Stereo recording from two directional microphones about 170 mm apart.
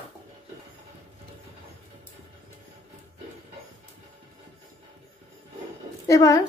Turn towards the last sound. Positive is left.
turn(degrees=20)  # may be behind; listen again after turning